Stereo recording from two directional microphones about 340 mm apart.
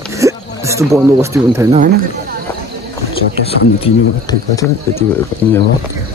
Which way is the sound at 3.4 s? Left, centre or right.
Centre.